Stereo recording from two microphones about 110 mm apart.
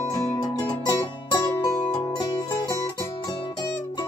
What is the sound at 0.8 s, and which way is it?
Music, 40° left (ahead or behind).